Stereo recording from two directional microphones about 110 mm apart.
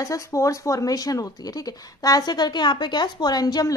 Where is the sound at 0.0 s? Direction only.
30° left (ahead or behind).